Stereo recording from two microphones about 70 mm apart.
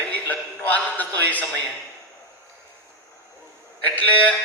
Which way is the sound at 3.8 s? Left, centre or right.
Left.